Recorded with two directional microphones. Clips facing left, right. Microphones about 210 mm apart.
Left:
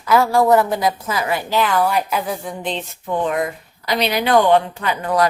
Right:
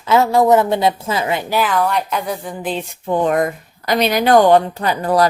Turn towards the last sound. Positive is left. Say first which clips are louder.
# right 3 dB
turn(degrees=-35)  # may be behind; listen again after turning